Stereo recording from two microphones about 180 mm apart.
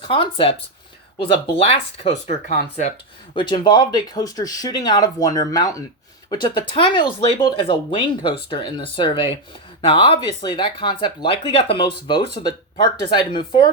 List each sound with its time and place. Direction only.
0.0 s speech: 30° left (ahead or behind)
1.5 s speech: 35° left (ahead or behind)
3.3 s speech: 25° left (ahead or behind)